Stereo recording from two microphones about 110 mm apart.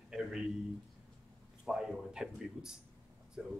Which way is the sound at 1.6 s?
Centre (ahead or behind).